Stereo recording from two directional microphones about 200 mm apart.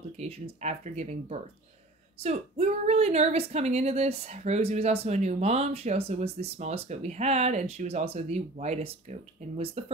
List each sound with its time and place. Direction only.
0.2 s speech: 35° right (ahead or behind)